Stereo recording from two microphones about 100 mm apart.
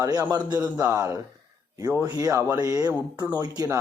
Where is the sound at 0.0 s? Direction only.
40° right (ahead or behind).